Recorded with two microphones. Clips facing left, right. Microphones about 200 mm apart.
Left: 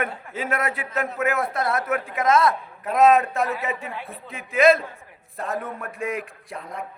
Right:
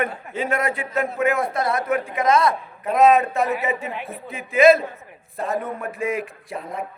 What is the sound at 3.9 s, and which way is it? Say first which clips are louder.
Speech: right 4 dB; 20° right (ahead or behind).